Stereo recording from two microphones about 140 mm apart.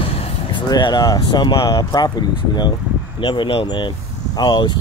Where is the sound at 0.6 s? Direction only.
30° left (ahead or behind).